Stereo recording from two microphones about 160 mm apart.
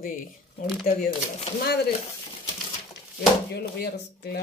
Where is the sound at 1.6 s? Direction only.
85° left.